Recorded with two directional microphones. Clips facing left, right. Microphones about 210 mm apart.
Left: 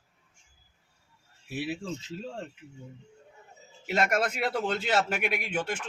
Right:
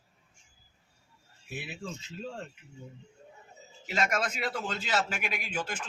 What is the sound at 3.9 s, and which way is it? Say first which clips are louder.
A man's voice: left 4 dB; 60° left (ahead or behind).